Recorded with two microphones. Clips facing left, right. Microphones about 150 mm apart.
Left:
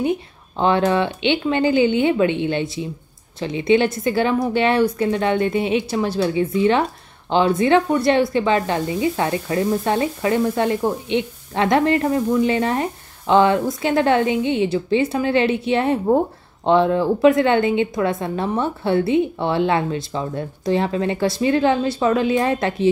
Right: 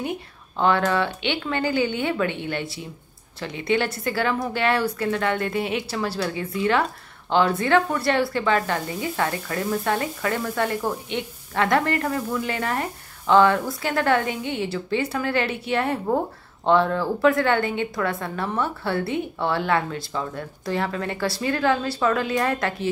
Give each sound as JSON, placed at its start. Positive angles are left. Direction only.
{"t": 0.6, "sound": "a woman's voice", "side_deg": 20}